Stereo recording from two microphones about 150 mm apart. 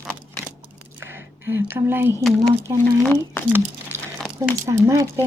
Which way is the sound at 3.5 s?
15° right (ahead or behind).